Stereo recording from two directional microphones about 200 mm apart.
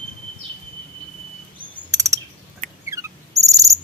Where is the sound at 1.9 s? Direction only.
15° right (ahead or behind).